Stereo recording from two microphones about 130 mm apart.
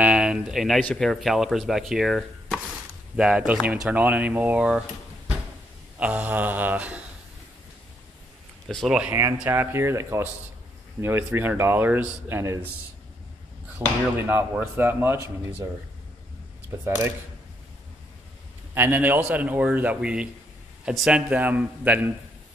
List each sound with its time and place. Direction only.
0.0 s a sound: 10° right (ahead or behind)
0.7 s speech: 5° left (ahead or behind)
5.9 s speech: 10° right (ahead or behind)
8.6 s speech: centre (ahead or behind)
9.5 s speech: 20° right (ahead or behind)
13.7 s speech: 15° right (ahead or behind)
18.8 s speech: 15° right (ahead or behind)